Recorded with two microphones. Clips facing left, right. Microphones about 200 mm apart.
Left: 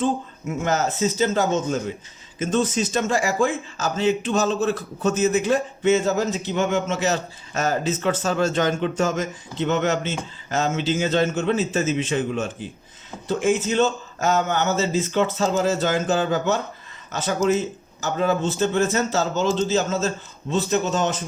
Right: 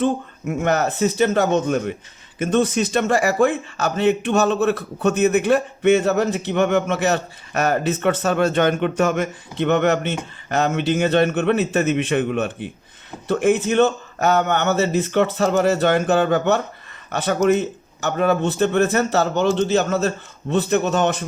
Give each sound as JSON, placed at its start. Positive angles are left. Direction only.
{"t": 0.0, "sound": "a man's voice", "side_deg": -60}